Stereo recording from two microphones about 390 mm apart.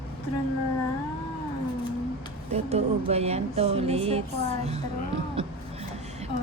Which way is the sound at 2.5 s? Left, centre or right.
Centre.